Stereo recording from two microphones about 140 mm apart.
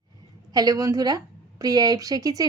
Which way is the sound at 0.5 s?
25° right (ahead or behind).